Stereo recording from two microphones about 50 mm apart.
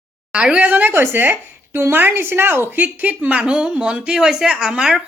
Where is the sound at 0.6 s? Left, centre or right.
Right.